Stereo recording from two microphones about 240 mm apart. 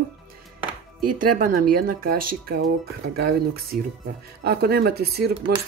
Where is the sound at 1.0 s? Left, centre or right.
Right.